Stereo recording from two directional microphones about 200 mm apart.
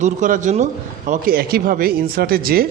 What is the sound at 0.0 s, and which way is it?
A man's voice, 40° right (ahead or behind).